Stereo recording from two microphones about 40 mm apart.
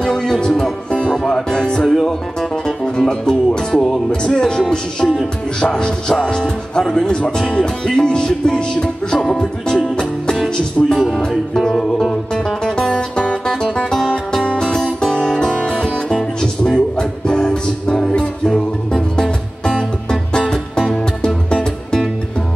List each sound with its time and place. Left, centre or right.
0.0 s music: centre
5.6 s speech: left
6.8 s music: centre
7.1 s speech: centre
9.1 s music: centre
12.7 s music: left